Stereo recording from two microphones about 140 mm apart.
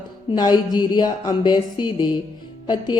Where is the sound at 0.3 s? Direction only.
30° left (ahead or behind).